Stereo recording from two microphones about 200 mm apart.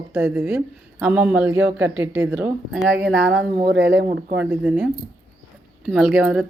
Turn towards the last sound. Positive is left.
turn(degrees=-5)  # may be behind; listen again after turning